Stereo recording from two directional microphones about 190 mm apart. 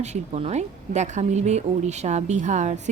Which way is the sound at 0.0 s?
35° right (ahead or behind).